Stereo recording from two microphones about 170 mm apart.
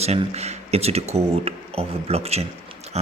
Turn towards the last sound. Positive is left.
turn(degrees=-40)  # may be behind; listen again after turning